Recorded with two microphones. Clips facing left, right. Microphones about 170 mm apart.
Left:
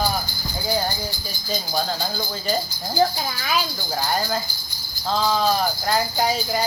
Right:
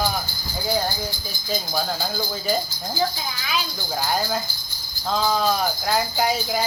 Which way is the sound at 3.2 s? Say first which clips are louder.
Left 3 dB; 50° left (ahead or behind).